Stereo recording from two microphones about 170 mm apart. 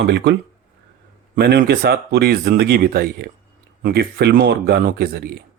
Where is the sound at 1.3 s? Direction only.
75° right (ahead or behind).